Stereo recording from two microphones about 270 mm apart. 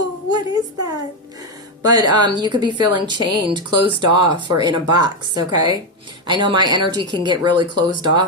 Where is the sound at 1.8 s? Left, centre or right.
Centre.